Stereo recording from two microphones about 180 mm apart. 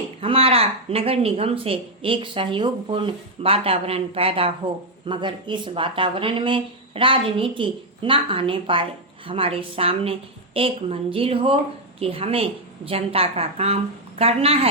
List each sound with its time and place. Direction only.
0.2 s speech: 30° right (ahead or behind)